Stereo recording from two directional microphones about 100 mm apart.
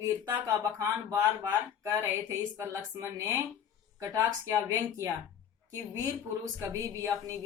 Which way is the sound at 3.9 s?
35° right (ahead or behind).